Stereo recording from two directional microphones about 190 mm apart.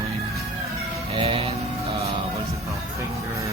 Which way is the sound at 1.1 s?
30° right (ahead or behind).